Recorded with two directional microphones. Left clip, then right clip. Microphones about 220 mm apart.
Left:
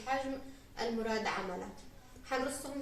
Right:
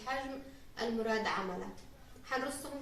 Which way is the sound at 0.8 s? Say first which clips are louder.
Right 1 dB; centre (ahead or behind).